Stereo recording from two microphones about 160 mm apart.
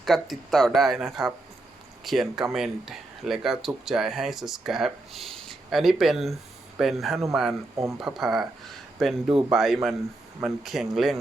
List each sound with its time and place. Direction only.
0.0 s speech: centre (ahead or behind)